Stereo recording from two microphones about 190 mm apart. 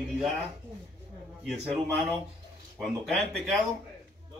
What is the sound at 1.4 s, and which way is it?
A man's voice, centre (ahead or behind).